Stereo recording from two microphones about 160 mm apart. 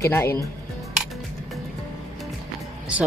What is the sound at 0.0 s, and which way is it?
Speech, 15° left (ahead or behind).